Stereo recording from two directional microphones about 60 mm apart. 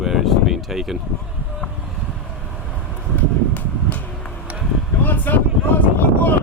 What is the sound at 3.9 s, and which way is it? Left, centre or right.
Vehicle, left.